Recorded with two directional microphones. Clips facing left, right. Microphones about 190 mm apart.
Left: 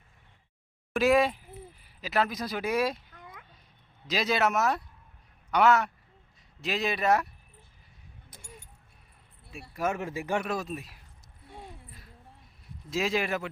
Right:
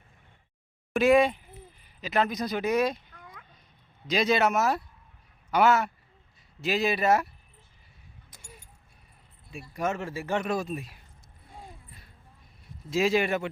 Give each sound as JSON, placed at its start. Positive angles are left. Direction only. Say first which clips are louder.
{"t": 0.9, "sound": "a man's voice", "louder": "right 3 dB", "side_deg": 0}
{"t": 9.5, "sound": "speech", "louder": "even", "side_deg": 0}
{"t": 9.9, "sound": "speech", "louder": "even", "side_deg": 15}
{"t": 10.4, "sound": "speech", "louder": "right 3 dB", "side_deg": 0}
{"t": 11.9, "sound": "a sound", "louder": "left 2 dB", "side_deg": 0}
{"t": 12.9, "sound": "speech", "louder": "right 4 dB", "side_deg": 0}